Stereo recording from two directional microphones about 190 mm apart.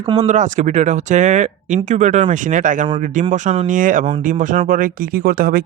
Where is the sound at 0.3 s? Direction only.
40° right (ahead or behind).